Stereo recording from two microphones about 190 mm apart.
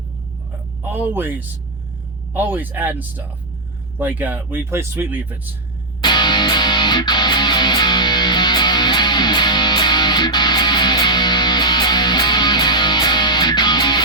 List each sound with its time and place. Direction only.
0.8 s speech: 10° right (ahead or behind)
6.0 s music: 25° left (ahead or behind)